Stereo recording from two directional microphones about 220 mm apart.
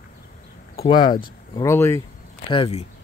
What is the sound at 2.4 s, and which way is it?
Speech, 25° left (ahead or behind).